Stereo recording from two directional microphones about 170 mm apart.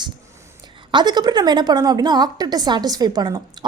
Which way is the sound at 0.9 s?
25° right (ahead or behind).